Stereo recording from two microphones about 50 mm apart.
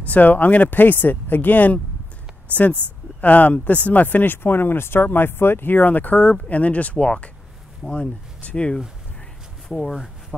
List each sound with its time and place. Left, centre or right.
0.0 s speech: left
3.2 s speech: left
9.7 s speech: centre